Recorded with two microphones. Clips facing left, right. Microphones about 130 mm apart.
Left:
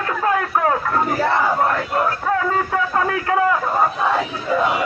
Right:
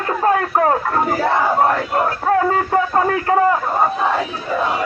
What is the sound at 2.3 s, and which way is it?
A man's voice, 40° right (ahead or behind).